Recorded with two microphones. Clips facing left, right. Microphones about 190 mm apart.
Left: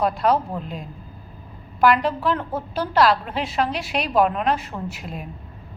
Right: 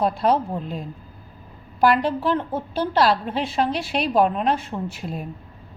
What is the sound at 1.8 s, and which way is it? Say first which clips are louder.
A woman's voice: even; 30° right (ahead or behind).